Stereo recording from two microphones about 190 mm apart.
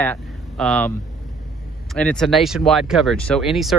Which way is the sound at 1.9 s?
5° left (ahead or behind).